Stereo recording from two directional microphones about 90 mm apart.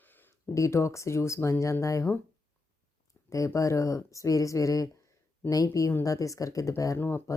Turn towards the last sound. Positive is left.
turn(degrees=30)  # may be behind; listen again after turning